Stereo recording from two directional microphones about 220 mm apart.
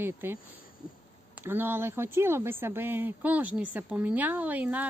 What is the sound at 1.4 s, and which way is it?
Speech, 10° right (ahead or behind).